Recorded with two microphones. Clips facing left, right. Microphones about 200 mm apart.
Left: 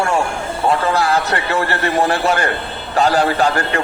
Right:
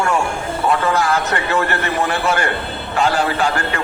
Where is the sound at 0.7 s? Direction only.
35° left (ahead or behind).